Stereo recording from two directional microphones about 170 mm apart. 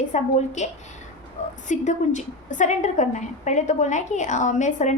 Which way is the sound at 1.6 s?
45° left (ahead or behind).